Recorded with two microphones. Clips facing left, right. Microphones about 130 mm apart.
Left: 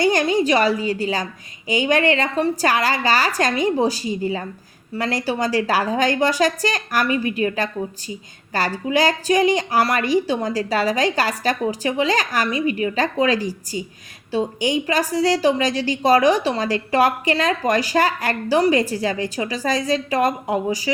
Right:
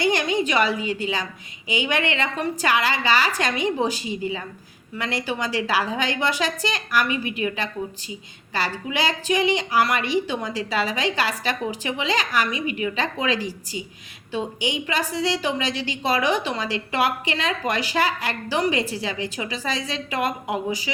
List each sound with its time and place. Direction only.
0.0 s a woman's voice: 45° left (ahead or behind)